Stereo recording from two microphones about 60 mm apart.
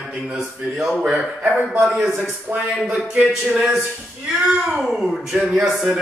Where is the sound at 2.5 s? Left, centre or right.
Centre.